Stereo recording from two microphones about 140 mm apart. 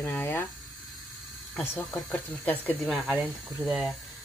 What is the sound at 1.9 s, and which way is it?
Speech, 10° left (ahead or behind).